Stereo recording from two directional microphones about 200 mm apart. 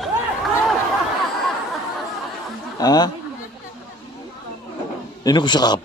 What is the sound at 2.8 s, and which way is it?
Speech, 20° left (ahead or behind).